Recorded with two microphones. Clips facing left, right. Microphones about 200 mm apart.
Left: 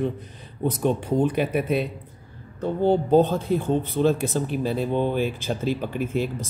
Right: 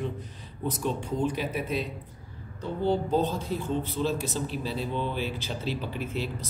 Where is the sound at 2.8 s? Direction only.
55° left (ahead or behind).